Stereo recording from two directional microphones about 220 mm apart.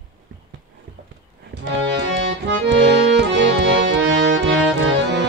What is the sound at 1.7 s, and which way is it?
Accordion, 55° right (ahead or behind).